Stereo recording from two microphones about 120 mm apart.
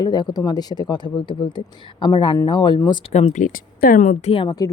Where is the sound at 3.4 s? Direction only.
90° left.